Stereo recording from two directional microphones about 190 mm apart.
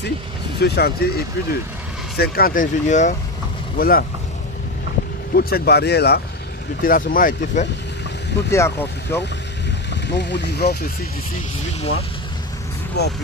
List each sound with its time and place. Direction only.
0.6 s speech: 60° left (ahead or behind); by 3.2 s 40° left (ahead or behind)
3.7 s speech: 50° left (ahead or behind)
5.3 s speech: 55° left (ahead or behind)
6.8 s speech: 45° left (ahead or behind)
8.5 s speech: 15° left (ahead or behind)
10.1 s speech: 65° left (ahead or behind)
13.0 s speech: 60° left (ahead or behind)